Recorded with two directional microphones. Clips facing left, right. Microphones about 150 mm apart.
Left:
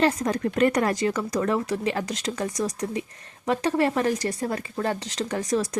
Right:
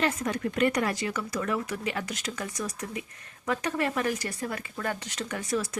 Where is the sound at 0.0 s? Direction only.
35° left (ahead or behind).